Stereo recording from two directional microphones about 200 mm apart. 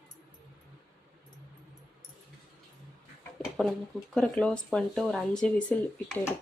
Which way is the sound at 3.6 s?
Centre (ahead or behind).